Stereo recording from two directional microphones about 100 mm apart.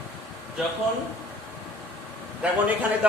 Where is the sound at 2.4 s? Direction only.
10° right (ahead or behind).